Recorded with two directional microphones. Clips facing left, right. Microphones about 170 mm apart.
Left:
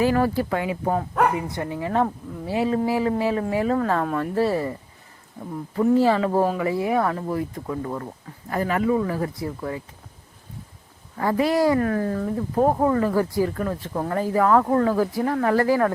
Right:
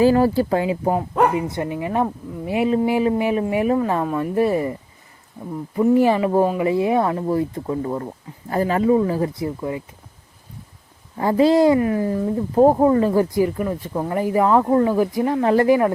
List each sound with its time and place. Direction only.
0.0 s speech: 30° right (ahead or behind)
0.9 s speech: 15° right (ahead or behind)
4.0 s speech: 5° right (ahead or behind)
4.4 s speech: 15° right (ahead or behind)
5.7 s speech: 15° right (ahead or behind)
11.2 s speech: 25° right (ahead or behind)
11.8 s speech: 10° right (ahead or behind)